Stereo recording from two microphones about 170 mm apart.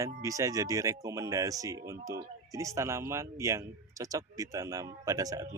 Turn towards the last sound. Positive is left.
turn(degrees=-20)  # may be behind; listen again after turning